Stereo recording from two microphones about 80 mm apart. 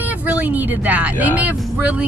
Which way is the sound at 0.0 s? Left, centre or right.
Right.